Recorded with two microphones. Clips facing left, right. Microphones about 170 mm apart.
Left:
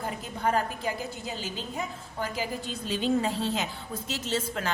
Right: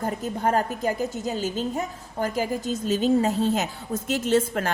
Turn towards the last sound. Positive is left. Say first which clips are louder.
# right 8 dB
turn(degrees=-50)  # may be behind; listen again after turning